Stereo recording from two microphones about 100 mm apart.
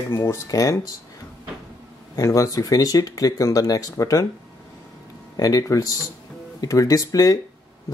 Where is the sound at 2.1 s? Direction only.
30° left (ahead or behind).